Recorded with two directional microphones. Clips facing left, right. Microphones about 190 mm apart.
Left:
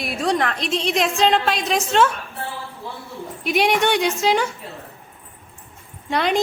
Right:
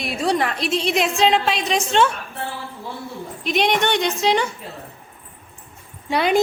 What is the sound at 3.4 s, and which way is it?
A woman's voice, 10° left (ahead or behind).